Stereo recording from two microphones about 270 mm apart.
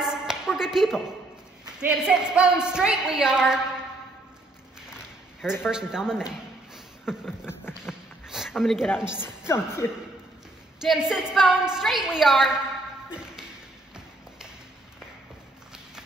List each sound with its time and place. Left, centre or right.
0.0 s a sound: centre
1.8 s a woman's voice: centre
5.7 s a man's voice: centre
7.4 s a sound: centre
8.3 s a woman's voice: centre
9.5 s speech: centre
10.8 s a woman's voice: centre